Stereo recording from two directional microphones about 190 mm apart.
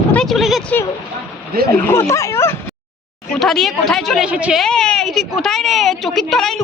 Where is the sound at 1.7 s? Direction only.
15° left (ahead or behind).